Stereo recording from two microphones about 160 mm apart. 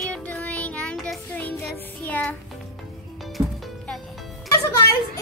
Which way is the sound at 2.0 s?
10° left (ahead or behind).